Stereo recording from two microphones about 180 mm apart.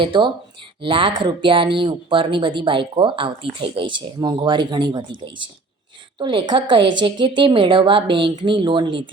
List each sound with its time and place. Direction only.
0.0 s speech: 25° right (ahead or behind)
6.1 s speech: 25° right (ahead or behind)